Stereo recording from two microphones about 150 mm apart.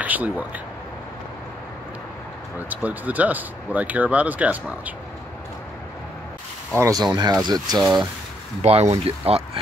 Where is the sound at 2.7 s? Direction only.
10° right (ahead or behind).